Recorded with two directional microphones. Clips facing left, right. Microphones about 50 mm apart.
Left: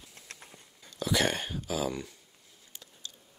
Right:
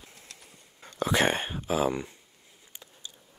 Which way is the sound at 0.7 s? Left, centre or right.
Right.